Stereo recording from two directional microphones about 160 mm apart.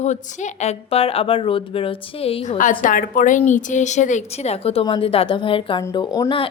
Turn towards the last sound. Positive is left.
turn(degrees=25)  # may be behind; listen again after turning